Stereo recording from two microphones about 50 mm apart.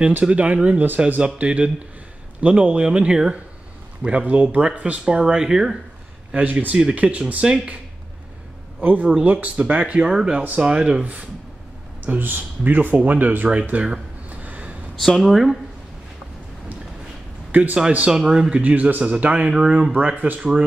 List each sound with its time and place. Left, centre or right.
0.2 s speech: right
4.7 s speech: right
5.0 s speech: centre
6.3 s speech: right
9.0 s speech: right
10.0 s speech: centre
12.1 s speech: right
14.3 s a sound: right
15.0 s speech: centre
17.5 s a man's voice: right
18.0 s speech: centre
18.7 s speech: right
19.4 s speech: centre
20.1 s speech: right